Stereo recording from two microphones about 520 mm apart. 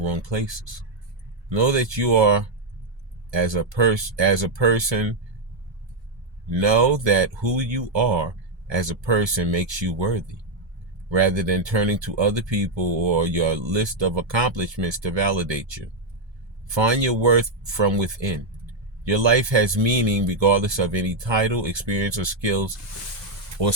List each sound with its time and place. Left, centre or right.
0.1 s speech: right
6.5 s speech: right
19.0 s speech: right